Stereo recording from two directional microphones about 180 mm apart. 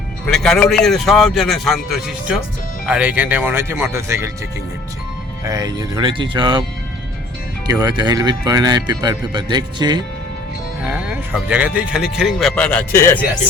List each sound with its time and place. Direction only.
0.3 s a man's voice: 5° left (ahead or behind); by 4.3 s 15° right (ahead or behind)
5.5 s speech: 20° right (ahead or behind)
7.7 s speech: 20° right (ahead or behind)
10.8 s a man's voice: 5° right (ahead or behind); by 13.1 s 15° left (ahead or behind)